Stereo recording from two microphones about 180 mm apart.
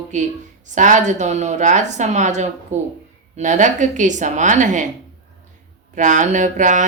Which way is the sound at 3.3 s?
40° right (ahead or behind).